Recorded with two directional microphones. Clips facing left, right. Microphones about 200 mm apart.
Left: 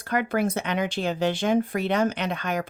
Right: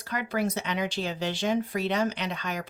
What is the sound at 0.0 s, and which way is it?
Speech, 55° left (ahead or behind).